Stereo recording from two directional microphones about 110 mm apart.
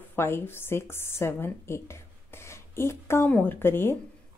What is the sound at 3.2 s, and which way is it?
Speech, 15° left (ahead or behind).